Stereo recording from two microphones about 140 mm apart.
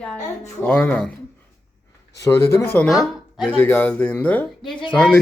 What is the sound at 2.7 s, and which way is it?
Speech, centre (ahead or behind).